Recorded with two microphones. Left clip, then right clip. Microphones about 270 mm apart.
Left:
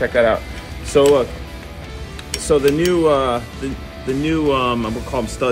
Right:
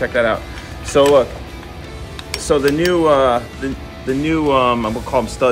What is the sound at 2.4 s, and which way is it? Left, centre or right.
Speech, centre.